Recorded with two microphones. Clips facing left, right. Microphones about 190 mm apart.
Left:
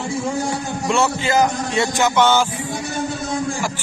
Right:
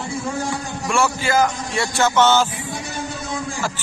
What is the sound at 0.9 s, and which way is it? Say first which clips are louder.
Speech: left 1 dB; 20° left (ahead or behind).